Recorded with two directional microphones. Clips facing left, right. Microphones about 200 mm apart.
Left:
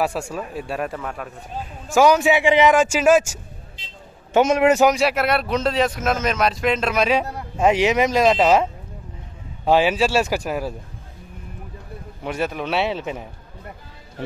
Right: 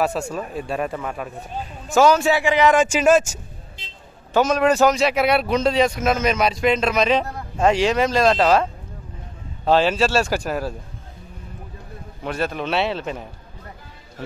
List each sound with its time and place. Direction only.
0.0 s speech: 10° left (ahead or behind)
1.9 s a man's voice: 15° left (ahead or behind)
2.7 s a man's voice: 5° left (ahead or behind)
4.3 s a man's voice: 25° left (ahead or behind)
9.7 s a man's voice: 15° left (ahead or behind)
12.2 s a man's voice: 10° left (ahead or behind)